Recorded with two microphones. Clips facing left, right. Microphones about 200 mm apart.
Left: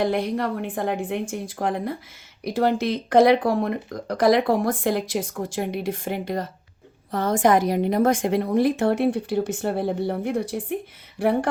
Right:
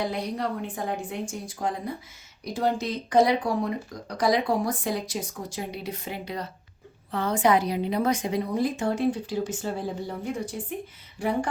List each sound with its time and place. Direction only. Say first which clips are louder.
0.1 s a woman's voice: left 5 dB; 60° left (ahead or behind)